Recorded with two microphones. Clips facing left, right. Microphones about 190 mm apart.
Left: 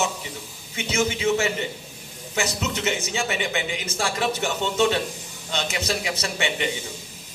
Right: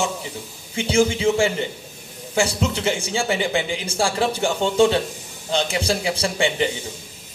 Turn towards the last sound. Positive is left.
turn(degrees=-30)  # may be behind; listen again after turning